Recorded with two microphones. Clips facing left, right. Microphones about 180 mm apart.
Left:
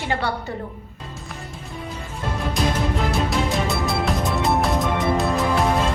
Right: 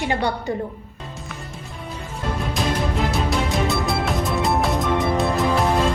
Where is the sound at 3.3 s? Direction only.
Centre (ahead or behind).